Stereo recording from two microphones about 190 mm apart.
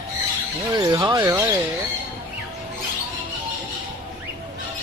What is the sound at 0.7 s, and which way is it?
Speech, 20° right (ahead or behind).